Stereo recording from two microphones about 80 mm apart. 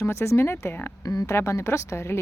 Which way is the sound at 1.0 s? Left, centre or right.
Left.